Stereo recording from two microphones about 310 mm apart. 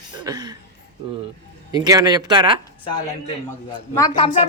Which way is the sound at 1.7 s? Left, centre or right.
Centre.